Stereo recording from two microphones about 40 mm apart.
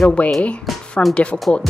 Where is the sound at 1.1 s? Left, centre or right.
Left.